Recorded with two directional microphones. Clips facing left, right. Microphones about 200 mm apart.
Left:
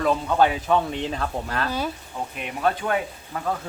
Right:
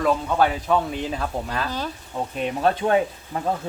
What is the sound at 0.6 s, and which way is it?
Speech, 5° right (ahead or behind).